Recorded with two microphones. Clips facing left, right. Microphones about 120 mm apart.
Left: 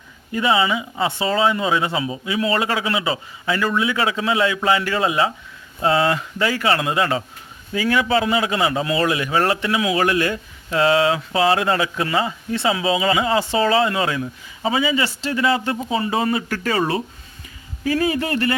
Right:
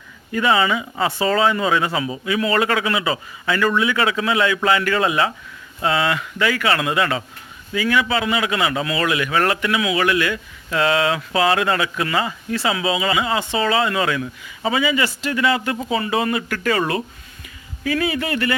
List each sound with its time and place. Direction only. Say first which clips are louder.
0.3 s speech: right 1 dB; 20° left (ahead or behind)
5.8 s a man's voice: left 2 dB; 35° left (ahead or behind)
17.8 s a man's voice: left 1 dB; 35° left (ahead or behind)